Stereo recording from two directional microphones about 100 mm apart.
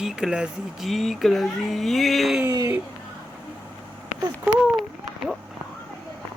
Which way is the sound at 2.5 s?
40° right (ahead or behind).